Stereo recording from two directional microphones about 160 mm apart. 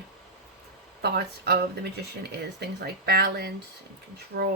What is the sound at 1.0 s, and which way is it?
Speech, 85° right.